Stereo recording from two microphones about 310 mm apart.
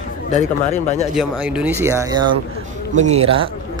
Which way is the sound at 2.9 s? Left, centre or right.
Right.